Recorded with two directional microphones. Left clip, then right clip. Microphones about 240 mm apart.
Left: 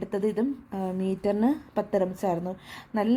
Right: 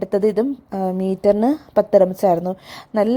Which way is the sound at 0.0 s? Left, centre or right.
Right.